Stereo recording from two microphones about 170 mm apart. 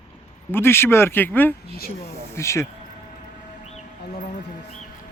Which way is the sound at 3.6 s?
45° left (ahead or behind).